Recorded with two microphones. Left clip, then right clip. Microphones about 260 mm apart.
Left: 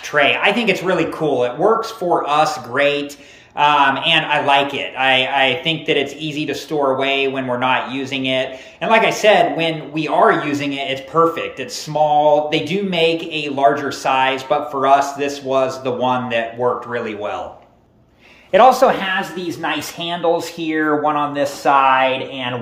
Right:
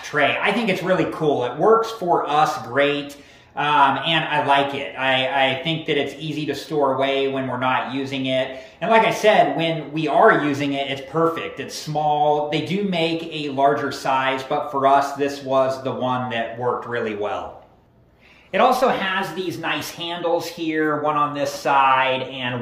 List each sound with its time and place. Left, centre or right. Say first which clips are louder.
0.1 s a man's voice: left 5 dB; centre
18.5 s a man's voice: left 6 dB; centre